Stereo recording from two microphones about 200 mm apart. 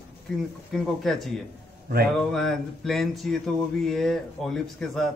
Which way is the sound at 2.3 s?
Centre (ahead or behind).